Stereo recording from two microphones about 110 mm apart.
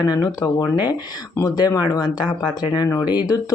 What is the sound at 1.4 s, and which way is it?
Speech, 35° left (ahead or behind).